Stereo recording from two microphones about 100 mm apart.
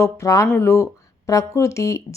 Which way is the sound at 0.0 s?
30° left (ahead or behind).